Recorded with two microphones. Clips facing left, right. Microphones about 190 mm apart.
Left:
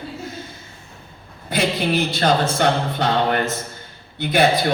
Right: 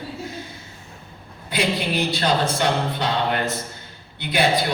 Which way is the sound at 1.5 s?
45° left (ahead or behind).